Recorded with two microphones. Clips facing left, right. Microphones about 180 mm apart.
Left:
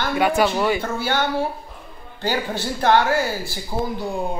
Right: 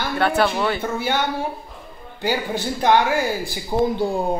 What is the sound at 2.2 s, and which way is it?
Speech, 15° right (ahead or behind).